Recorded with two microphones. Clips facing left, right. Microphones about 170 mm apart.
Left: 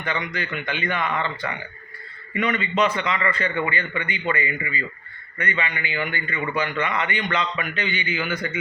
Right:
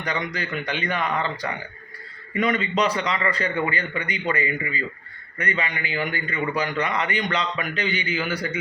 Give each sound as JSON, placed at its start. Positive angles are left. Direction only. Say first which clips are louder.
{"t": 0.0, "sound": "a man's voice", "louder": "even", "side_deg": -40}